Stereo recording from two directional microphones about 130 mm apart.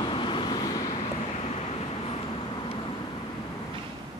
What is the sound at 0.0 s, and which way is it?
Vehicle, 40° left (ahead or behind).